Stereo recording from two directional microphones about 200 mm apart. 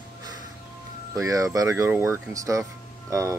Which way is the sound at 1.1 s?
15° right (ahead or behind).